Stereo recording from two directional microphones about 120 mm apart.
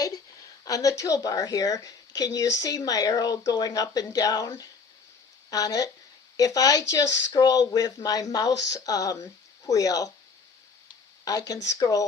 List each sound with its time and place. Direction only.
0.0 s a woman's voice: 30° left (ahead or behind)
11.3 s speech: 30° left (ahead or behind)